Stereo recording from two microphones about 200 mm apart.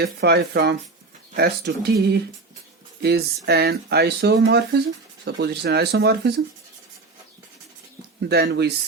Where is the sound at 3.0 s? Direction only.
55° right (ahead or behind).